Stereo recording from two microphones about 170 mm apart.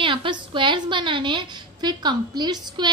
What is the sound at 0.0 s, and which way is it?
A woman's voice, 30° right (ahead or behind).